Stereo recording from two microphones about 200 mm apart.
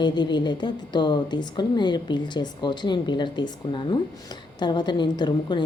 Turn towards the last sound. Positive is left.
turn(degrees=20)  # may be behind; listen again after turning